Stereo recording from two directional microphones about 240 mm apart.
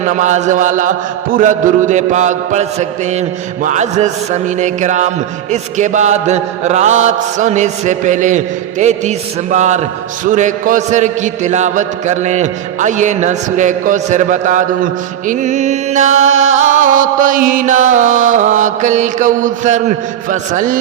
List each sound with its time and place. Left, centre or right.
0.1 s mantra: right
15.3 s music: right
16.2 s music: right
16.6 s mantra: right